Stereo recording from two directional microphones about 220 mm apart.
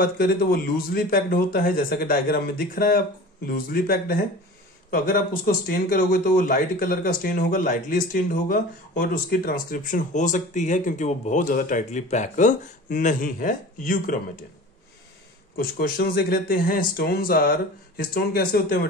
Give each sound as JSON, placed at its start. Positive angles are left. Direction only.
{"t": 0.0, "sound": "speech", "side_deg": 40}
{"t": 15.5, "sound": "speech", "side_deg": 40}